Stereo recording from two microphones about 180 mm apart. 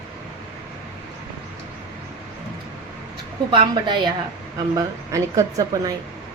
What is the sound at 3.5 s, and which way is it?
A woman's voice, 25° right (ahead or behind).